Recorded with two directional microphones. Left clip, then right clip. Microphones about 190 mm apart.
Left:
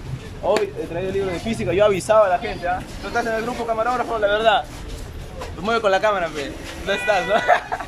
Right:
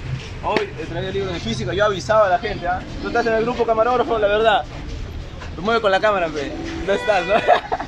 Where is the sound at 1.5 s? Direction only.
10° left (ahead or behind).